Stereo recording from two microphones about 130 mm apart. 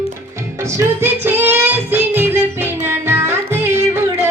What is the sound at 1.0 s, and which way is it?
Music, 15° right (ahead or behind).